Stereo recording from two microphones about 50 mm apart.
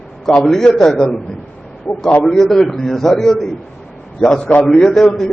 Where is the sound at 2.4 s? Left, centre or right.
Centre.